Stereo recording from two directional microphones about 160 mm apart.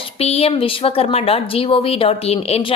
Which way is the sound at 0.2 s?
40° left (ahead or behind).